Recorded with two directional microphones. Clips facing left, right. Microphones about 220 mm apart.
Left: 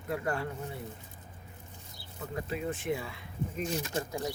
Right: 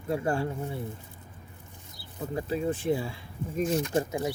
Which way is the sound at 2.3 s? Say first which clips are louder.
Right 6 dB; 30° right (ahead or behind).